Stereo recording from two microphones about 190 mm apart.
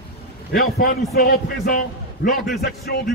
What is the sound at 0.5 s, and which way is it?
A man's voice, 50° left (ahead or behind).